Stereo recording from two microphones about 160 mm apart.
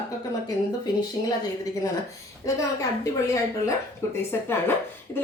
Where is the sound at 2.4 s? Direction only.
20° left (ahead or behind).